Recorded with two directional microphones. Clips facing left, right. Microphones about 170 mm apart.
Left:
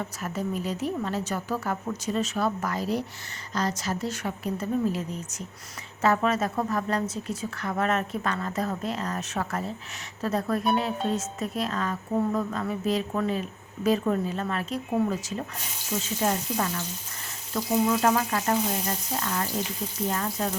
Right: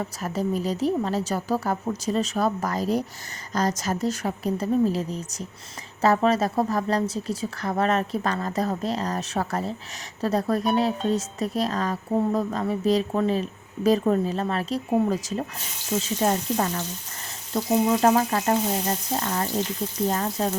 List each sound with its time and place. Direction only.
0.0 s a woman's voice: 35° right (ahead or behind)
18.0 s a woman's voice: 35° right (ahead or behind)